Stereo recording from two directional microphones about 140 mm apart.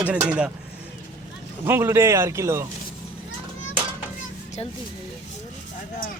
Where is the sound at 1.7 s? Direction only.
20° right (ahead or behind).